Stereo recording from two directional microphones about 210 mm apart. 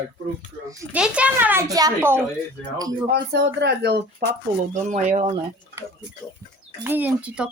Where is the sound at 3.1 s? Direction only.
50° right (ahead or behind).